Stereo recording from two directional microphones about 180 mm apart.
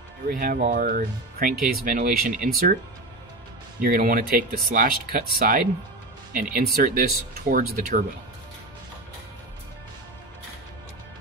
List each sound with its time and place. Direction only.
0.3 s speech: 55° right (ahead or behind)
2.3 s speech: 5° right (ahead or behind)
3.8 s speech: 50° right (ahead or behind)